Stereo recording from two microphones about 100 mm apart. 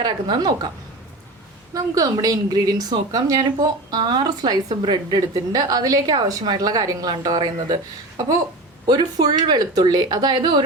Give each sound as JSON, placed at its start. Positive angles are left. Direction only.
{"t": 0.0, "sound": "speech", "side_deg": -45}
{"t": 1.7, "sound": "a woman's voice", "side_deg": -40}
{"t": 8.9, "sound": "speech", "side_deg": -45}